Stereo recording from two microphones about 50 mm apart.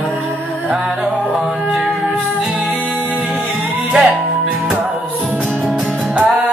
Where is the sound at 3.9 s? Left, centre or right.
Centre.